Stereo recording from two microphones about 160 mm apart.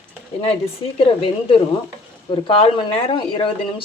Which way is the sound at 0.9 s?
35° left (ahead or behind).